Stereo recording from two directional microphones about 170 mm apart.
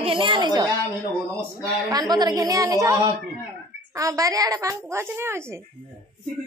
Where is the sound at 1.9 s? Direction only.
25° right (ahead or behind).